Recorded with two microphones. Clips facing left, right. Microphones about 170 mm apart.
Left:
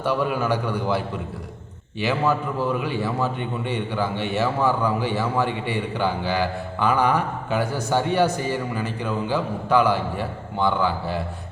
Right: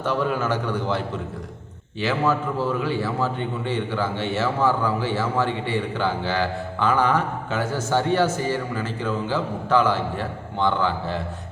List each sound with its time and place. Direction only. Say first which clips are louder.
0.0 s a man's voice: left 1 dB; 10° left (ahead or behind)